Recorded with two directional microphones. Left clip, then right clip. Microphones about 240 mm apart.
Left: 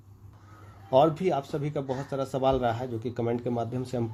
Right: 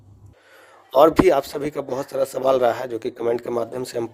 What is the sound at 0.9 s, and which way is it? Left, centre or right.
Speech, right.